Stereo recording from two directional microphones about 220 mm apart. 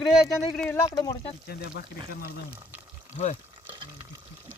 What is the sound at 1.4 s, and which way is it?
Speech, 45° left (ahead or behind).